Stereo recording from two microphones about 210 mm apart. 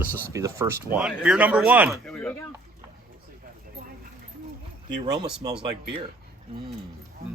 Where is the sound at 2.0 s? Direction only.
5° left (ahead or behind).